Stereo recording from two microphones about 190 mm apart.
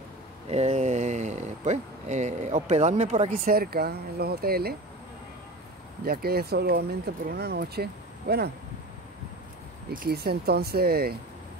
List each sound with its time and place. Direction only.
0.5 s speech: 35° right (ahead or behind); by 4.7 s 55° right (ahead or behind)
6.0 s speech: 55° right (ahead or behind)
9.8 s speech: 55° right (ahead or behind)